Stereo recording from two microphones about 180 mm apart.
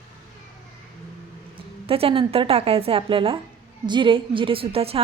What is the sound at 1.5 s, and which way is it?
A woman's voice, 30° right (ahead or behind).